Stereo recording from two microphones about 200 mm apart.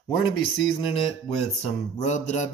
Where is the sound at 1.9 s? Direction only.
35° left (ahead or behind).